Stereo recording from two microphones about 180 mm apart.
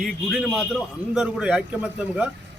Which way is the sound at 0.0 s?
Centre (ahead or behind).